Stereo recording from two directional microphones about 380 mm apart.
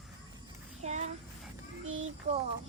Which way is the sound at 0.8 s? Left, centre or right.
Centre.